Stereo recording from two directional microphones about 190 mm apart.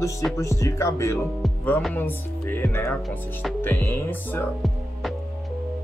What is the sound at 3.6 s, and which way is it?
Speech, 15° left (ahead or behind).